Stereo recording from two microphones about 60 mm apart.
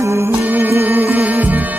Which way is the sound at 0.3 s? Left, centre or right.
Right.